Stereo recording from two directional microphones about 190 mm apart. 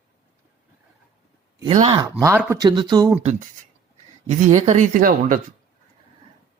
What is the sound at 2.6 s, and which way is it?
Speech, 25° right (ahead or behind).